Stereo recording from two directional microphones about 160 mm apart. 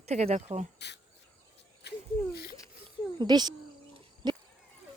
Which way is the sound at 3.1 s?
25° right (ahead or behind).